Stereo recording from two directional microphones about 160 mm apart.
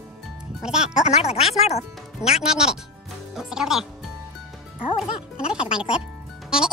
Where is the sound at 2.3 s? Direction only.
5° right (ahead or behind).